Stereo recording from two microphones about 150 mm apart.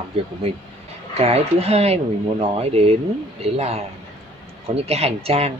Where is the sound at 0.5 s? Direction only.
40° right (ahead or behind).